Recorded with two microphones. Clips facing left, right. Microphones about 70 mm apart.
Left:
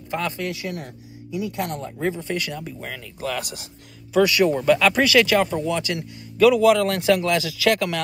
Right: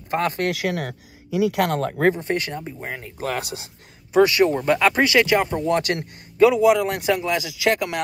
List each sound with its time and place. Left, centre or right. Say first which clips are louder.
0.4 s speech: right 5 dB; right
2.1 s a man's voice: right 2 dB; right
5.7 s speech: right 4 dB; right
6.3 s speech: even; right